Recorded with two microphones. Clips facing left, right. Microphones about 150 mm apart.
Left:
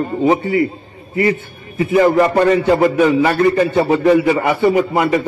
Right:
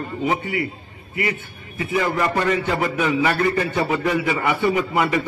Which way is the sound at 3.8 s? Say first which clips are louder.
Left 10 dB; 35° left (ahead or behind).